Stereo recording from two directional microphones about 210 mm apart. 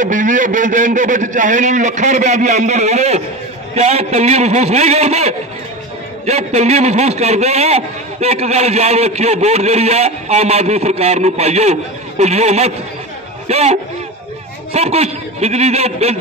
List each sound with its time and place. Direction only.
0.0 s a man's voice: 40° right (ahead or behind)